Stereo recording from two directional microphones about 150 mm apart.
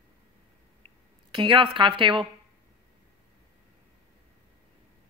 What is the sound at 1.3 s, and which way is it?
A woman's voice, 35° right (ahead or behind).